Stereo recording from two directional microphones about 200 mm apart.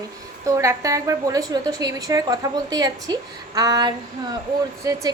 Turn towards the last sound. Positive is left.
turn(degrees=-15)  # may be behind; listen again after turning